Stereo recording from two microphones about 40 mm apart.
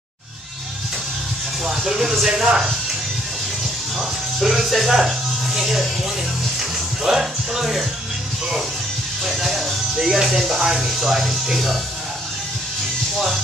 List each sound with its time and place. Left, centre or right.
1.7 s speech: centre
4.4 s speech: centre
7.0 s speech: centre
9.2 s speech: centre
9.9 s speech: centre